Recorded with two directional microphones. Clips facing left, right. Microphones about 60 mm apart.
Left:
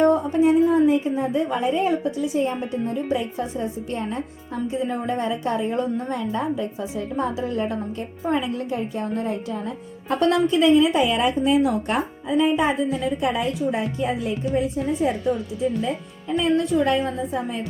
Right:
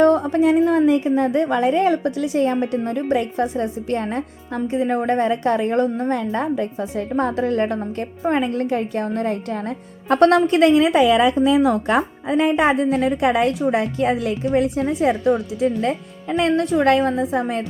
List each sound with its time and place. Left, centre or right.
0.0 s a woman's voice: right
12.3 s a woman's voice: right